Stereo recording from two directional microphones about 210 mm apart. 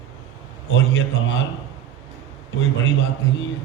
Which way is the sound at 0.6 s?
60° left (ahead or behind).